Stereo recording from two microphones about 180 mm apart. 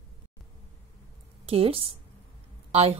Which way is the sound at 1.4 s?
30° right (ahead or behind).